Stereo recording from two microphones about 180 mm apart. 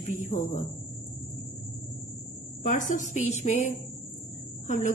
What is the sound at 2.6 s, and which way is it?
A woman's voice, 45° left (ahead or behind).